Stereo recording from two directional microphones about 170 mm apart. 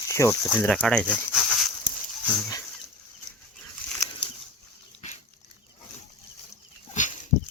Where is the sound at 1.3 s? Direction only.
Centre (ahead or behind).